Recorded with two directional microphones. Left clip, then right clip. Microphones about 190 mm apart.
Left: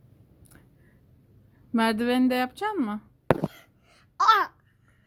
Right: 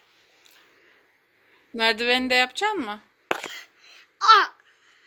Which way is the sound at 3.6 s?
50° left (ahead or behind).